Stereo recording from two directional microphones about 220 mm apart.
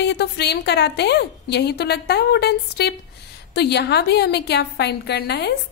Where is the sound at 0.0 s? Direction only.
50° left (ahead or behind).